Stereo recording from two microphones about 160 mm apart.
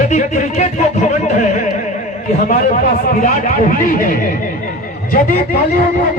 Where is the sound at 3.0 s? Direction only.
55° left (ahead or behind).